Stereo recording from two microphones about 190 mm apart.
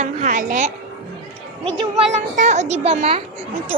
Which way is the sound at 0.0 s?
40° right (ahead or behind).